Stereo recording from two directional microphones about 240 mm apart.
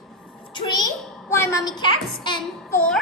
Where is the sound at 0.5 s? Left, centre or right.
Centre.